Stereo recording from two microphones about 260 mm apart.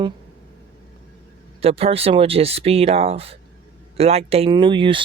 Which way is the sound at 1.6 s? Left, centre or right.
Right.